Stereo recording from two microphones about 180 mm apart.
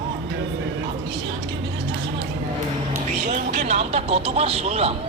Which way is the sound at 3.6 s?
35° right (ahead or behind).